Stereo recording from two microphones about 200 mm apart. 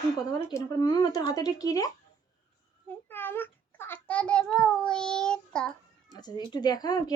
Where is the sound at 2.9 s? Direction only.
10° left (ahead or behind).